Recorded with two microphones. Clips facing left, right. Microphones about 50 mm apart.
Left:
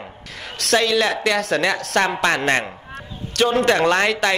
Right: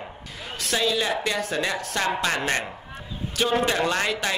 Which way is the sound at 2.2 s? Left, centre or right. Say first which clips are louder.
Left 6 dB; left.